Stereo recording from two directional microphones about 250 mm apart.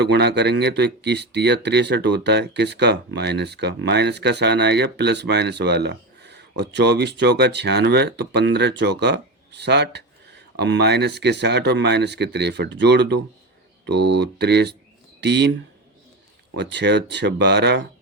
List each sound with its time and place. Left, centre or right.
0.0 s speech: right
16.6 s speech: right